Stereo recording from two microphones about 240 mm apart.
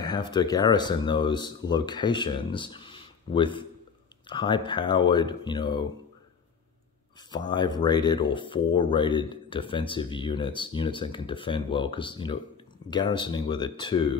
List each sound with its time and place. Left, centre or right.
0.0 s speech: centre
7.2 s speech: centre